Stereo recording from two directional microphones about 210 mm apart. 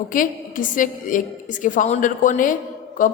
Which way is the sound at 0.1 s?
40° left (ahead or behind).